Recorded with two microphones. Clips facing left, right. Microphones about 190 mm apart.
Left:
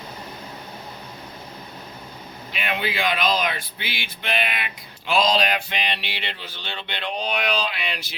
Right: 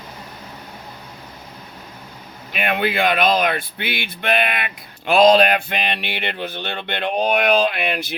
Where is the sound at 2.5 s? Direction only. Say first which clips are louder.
Right 6 dB; 55° right (ahead or behind).